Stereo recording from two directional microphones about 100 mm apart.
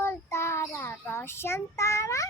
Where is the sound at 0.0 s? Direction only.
25° left (ahead or behind).